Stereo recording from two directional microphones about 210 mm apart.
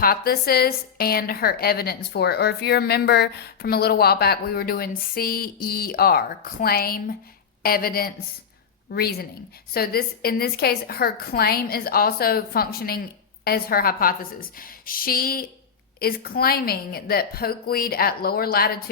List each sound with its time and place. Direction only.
0.0 s a woman's voice: 45° left (ahead or behind)